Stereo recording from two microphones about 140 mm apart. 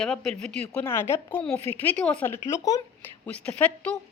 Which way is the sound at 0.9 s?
20° left (ahead or behind).